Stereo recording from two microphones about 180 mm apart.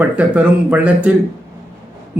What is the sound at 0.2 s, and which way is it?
Speech, 5° right (ahead or behind).